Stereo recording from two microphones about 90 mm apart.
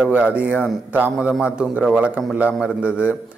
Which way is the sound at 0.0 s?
15° right (ahead or behind).